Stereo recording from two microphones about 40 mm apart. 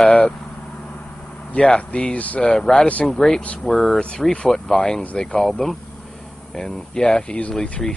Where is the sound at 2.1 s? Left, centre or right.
Left.